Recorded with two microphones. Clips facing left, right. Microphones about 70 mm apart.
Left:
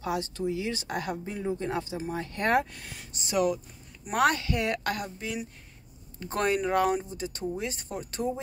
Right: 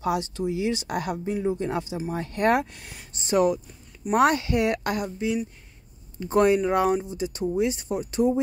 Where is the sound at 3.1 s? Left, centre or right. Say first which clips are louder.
Right 5 dB; right.